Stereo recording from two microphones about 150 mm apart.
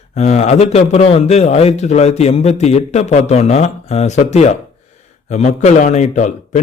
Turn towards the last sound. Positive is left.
turn(degrees=55)  # may be behind; listen again after turning